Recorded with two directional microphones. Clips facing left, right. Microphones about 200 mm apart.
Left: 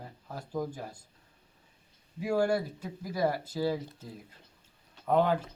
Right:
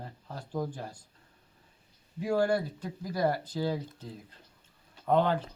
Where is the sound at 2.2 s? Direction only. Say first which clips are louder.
Even; 10° left (ahead or behind).